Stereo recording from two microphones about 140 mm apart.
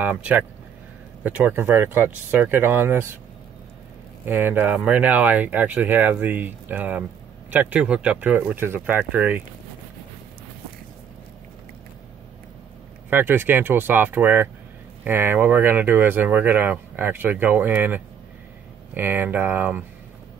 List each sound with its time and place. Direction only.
0.0 s speech: 10° right (ahead or behind)
4.3 s speech: 15° right (ahead or behind)
13.1 s speech: 15° right (ahead or behind)